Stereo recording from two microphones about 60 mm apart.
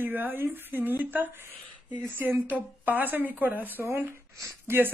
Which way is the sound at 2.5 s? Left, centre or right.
Right.